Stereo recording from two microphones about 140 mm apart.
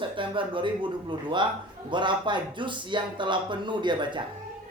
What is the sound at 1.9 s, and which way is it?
Speech, 35° right (ahead or behind).